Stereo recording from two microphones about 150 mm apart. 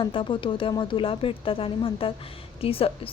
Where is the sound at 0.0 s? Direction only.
35° left (ahead or behind).